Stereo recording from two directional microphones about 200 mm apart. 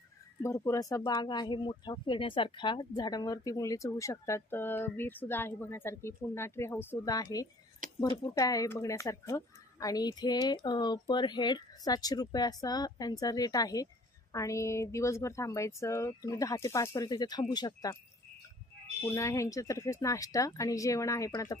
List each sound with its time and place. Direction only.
0.4 s speech: 15° left (ahead or behind)
7.8 s a sound: 40° right (ahead or behind)
8.4 s a woman's voice: 15° left (ahead or behind)
19.1 s speech: 15° left (ahead or behind)